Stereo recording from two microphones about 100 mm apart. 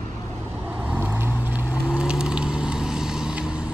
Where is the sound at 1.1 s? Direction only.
20° right (ahead or behind).